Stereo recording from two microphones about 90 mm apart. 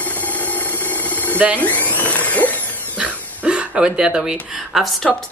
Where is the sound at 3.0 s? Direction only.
10° right (ahead or behind).